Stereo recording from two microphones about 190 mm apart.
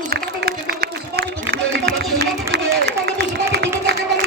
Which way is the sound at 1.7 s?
60° right (ahead or behind).